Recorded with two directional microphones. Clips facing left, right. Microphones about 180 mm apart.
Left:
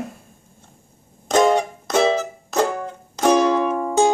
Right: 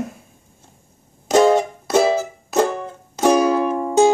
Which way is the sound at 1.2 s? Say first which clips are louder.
Right 2 dB; 5° right (ahead or behind).